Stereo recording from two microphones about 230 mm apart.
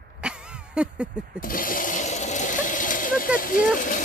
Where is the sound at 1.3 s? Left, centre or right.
Left.